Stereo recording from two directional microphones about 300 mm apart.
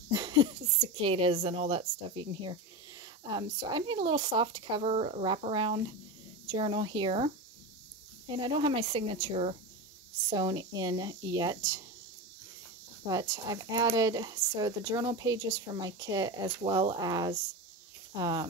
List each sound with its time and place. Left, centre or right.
0.1 s a sound: centre
1.0 s speech: centre
8.3 s speech: centre
13.0 s speech: centre